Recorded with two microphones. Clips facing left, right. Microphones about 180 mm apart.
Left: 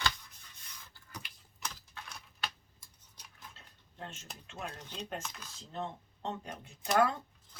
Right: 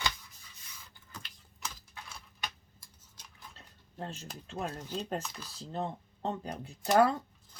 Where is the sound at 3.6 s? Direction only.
35° right (ahead or behind).